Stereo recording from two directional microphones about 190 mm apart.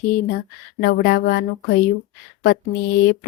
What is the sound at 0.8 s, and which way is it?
Speech, 55° left (ahead or behind).